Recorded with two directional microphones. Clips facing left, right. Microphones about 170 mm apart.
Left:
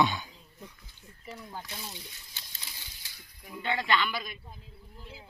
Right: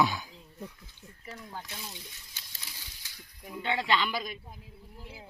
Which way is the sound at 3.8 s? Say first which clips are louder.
Even; 30° right (ahead or behind).